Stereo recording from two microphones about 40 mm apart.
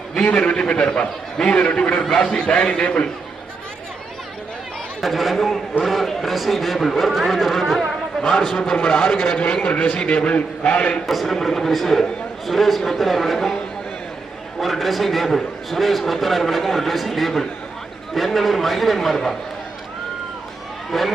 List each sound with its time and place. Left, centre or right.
0.2 s a man's voice: left
4.9 s a man's voice: centre
9.6 s a man's voice: left
11.0 s a man's voice: centre
14.6 s a man's voice: centre
20.9 s a man's voice: centre